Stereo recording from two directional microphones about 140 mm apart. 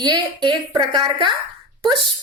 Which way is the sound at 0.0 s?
30° right (ahead or behind).